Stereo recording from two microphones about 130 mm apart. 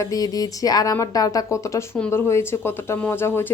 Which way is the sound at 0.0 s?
30° left (ahead or behind).